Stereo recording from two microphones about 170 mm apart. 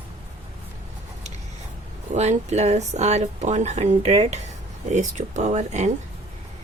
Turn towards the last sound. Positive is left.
turn(degrees=-40)  # may be behind; listen again after turning